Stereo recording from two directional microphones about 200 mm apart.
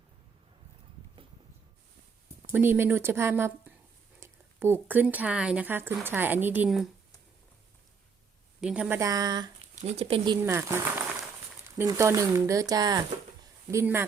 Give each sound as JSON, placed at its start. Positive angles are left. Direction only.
{"t": 2.5, "sound": "speech", "side_deg": -10}
{"t": 8.6, "sound": "speech", "side_deg": -5}
{"t": 9.0, "sound": "speech", "side_deg": -15}
{"t": 9.7, "sound": "speech", "side_deg": -30}
{"t": 10.4, "sound": "speech", "side_deg": -15}
{"t": 11.8, "sound": "speech", "side_deg": -15}